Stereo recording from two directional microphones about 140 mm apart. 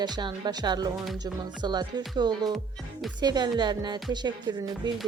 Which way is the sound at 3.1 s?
30° right (ahead or behind).